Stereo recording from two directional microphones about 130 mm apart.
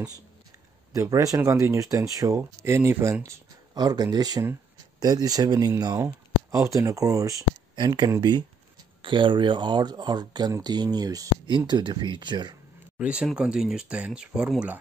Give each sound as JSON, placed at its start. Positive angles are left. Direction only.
{"t": 0.9, "sound": "speech", "side_deg": -25}
{"t": 12.9, "sound": "speech", "side_deg": -10}